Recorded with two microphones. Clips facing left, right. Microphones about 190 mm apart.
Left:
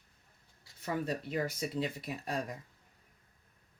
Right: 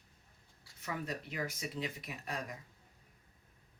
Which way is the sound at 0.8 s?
30° left (ahead or behind).